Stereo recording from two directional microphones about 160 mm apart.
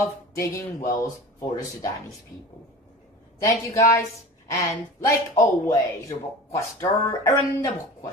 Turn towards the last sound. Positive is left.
turn(degrees=20)  # may be behind; listen again after turning